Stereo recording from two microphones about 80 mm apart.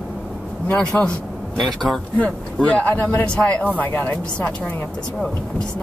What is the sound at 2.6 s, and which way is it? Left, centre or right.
Speech, centre.